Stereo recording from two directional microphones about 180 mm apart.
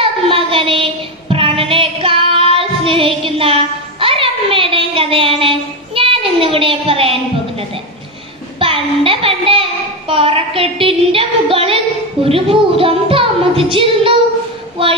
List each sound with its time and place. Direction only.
0.3 s child singing: 30° right (ahead or behind)
8.5 s a woman's voice: 30° right (ahead or behind)